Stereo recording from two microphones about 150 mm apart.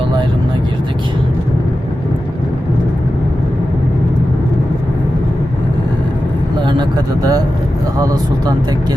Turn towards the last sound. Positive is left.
turn(degrees=-25)  # may be behind; listen again after turning